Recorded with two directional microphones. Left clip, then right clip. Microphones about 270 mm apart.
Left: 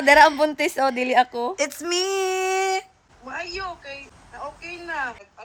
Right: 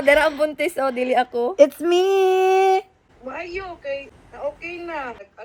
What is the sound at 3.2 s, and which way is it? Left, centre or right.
Speech, centre.